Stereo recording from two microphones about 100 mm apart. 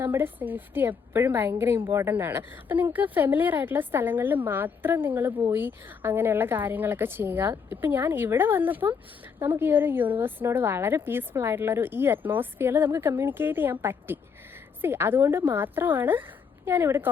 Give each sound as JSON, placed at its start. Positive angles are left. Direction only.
{"t": 0.0, "sound": "a woman's voice", "side_deg": -20}